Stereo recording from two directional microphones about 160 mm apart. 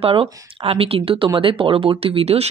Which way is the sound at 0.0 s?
35° right (ahead or behind).